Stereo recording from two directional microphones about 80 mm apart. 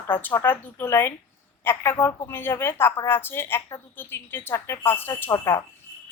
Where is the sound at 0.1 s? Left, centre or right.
Left.